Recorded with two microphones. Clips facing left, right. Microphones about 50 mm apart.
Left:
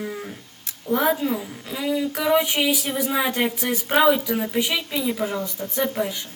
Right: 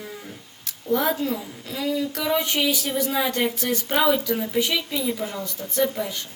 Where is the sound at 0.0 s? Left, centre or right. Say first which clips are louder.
Left 6 dB; centre.